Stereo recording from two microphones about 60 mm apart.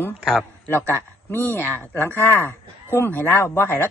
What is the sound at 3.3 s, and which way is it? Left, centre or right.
Speech, left.